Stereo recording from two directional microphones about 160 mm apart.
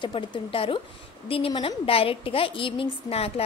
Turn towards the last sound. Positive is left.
turn(degrees=40)  # may be behind; listen again after turning